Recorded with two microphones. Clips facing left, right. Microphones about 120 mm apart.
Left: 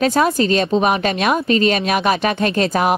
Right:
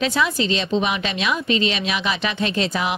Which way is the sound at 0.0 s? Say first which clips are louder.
Left 6 dB; 45° left (ahead or behind).